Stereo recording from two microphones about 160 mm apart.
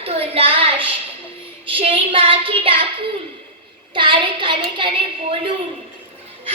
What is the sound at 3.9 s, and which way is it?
A woman's voice, 30° right (ahead or behind).